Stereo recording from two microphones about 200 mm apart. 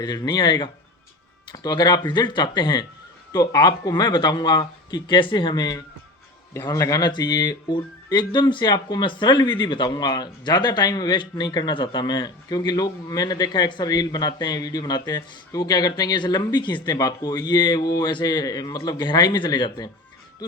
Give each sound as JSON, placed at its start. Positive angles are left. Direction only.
{"t": 0.0, "sound": "speech", "side_deg": 20}